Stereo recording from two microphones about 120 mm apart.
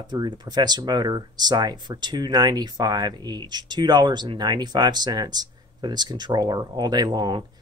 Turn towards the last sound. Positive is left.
turn(degrees=-40)  # may be behind; listen again after turning